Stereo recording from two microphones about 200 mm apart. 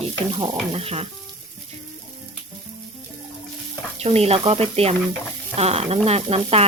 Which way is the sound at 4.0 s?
30° right (ahead or behind).